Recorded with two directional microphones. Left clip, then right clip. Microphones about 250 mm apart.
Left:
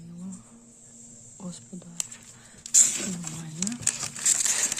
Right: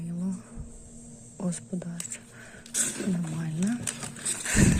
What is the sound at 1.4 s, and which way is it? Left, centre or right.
Speech, centre.